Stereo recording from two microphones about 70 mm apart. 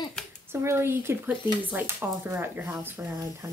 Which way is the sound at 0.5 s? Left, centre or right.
Right.